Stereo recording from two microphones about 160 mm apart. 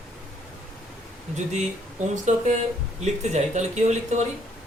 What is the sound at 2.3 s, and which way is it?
Speech, 50° right (ahead or behind).